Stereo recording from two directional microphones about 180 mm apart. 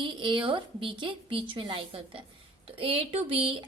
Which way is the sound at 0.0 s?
25° right (ahead or behind).